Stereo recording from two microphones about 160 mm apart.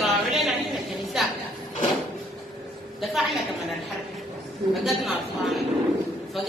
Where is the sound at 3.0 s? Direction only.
Centre (ahead or behind).